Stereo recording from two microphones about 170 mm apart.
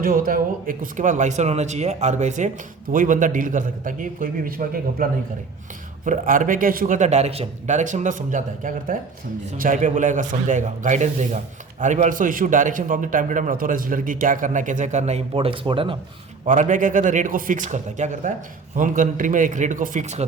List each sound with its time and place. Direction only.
0.0 s a man's voice: 55° right (ahead or behind)
6.1 s a man's voice: 50° right (ahead or behind); by 16.0 s 30° right (ahead or behind)
16.5 s a man's voice: 50° right (ahead or behind)